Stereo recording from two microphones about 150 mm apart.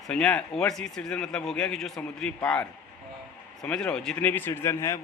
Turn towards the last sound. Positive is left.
turn(degrees=15)  # may be behind; listen again after turning